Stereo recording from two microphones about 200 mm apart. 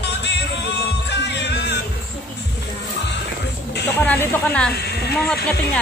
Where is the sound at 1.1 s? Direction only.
60° left (ahead or behind).